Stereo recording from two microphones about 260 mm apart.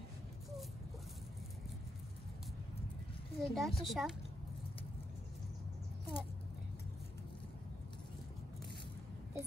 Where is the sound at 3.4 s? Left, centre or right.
Centre.